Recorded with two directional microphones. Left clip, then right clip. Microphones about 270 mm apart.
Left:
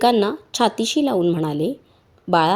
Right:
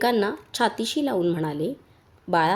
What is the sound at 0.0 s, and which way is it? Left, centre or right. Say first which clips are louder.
A woman's voice: left 5 dB; centre.